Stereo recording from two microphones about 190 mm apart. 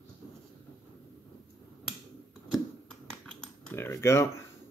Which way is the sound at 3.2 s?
10° left (ahead or behind).